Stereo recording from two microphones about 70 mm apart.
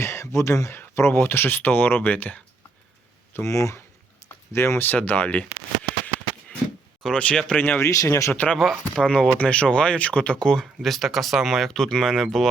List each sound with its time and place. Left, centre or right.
0.0 s a sound: left
0.9 s speech: left
3.3 s speech: left
7.0 s speech: centre
7.6 s speech: left
7.9 s speech: left
8.3 s speech: left
9.0 s speech: centre